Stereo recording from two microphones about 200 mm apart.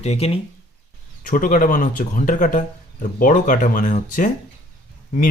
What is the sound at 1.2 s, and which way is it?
Speech, 45° left (ahead or behind).